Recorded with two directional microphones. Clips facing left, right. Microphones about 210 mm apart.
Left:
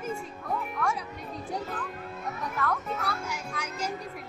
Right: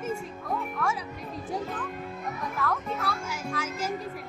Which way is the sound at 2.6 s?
Centre (ahead or behind).